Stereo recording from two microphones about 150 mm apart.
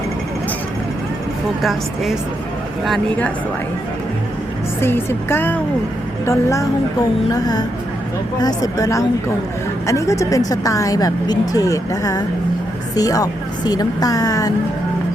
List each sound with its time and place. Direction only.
2.8 s speech: 5° left (ahead or behind)
4.8 s a woman's voice: 15° left (ahead or behind)